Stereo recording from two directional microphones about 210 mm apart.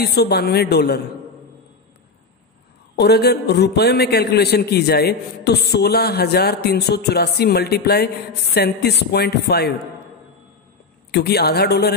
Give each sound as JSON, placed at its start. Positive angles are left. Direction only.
{"t": 0.0, "sound": "a man's voice", "side_deg": 50}
{"t": 3.0, "sound": "a man's voice", "side_deg": 50}
{"t": 11.1, "sound": "a man's voice", "side_deg": 50}